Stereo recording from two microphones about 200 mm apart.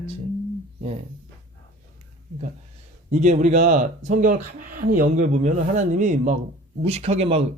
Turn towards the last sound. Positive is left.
turn(degrees=-30)  # may be behind; listen again after turning